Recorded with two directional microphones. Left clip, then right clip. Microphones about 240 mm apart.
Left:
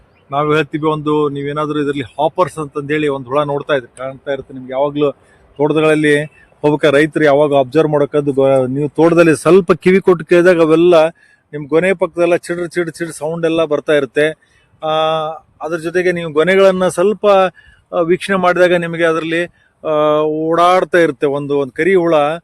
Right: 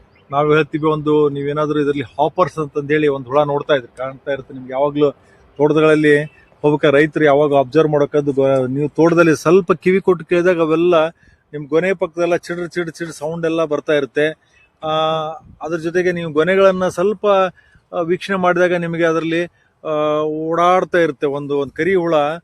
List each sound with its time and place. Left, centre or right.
0.3 s a man's voice: left